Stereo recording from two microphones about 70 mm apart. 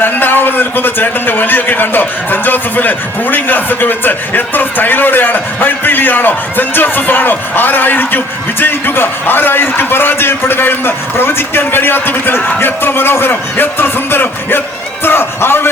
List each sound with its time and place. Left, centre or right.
0.0 s a man's voice: left